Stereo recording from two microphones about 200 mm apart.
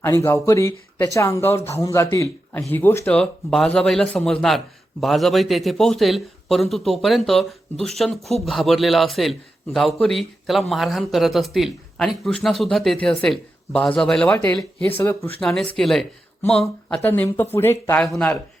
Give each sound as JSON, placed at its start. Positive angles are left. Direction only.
{"t": 0.0, "sound": "speech", "side_deg": 15}